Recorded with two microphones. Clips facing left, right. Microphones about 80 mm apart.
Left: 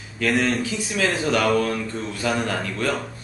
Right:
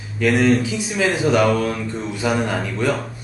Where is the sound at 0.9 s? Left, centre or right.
Centre.